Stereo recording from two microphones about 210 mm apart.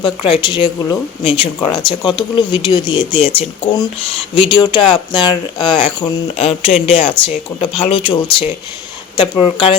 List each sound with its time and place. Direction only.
0.0 s speech: 20° left (ahead or behind)